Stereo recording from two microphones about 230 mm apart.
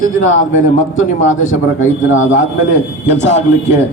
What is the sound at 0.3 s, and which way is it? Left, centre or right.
A man's voice, left.